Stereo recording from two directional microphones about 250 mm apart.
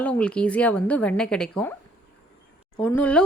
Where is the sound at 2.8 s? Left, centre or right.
Centre.